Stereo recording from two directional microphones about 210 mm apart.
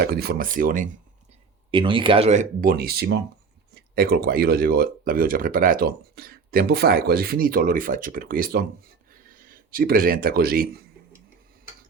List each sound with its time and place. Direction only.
0.0 s speech: 50° right (ahead or behind)
1.7 s speech: 25° right (ahead or behind); by 10.7 s 45° right (ahead or behind)